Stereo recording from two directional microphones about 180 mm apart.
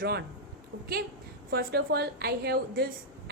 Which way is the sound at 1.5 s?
60° right (ahead or behind).